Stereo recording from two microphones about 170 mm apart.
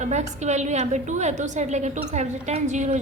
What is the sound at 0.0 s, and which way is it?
A woman's voice, 45° right (ahead or behind).